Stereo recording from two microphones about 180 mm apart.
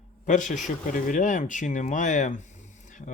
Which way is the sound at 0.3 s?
45° left (ahead or behind).